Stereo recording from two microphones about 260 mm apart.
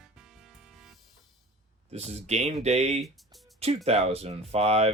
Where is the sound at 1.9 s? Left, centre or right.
Right.